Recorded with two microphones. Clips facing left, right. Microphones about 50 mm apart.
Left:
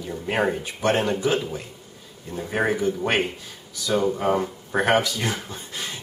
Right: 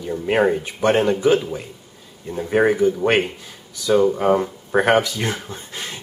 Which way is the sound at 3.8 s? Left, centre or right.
Centre.